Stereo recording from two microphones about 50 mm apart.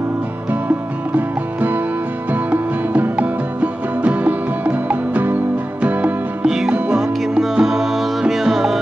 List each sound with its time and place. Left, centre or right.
0.5 s music: right
6.4 s music: centre